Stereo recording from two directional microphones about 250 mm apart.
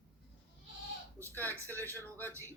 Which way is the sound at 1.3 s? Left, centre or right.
Centre.